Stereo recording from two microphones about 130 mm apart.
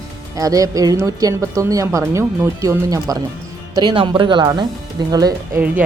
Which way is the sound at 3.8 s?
40° right (ahead or behind).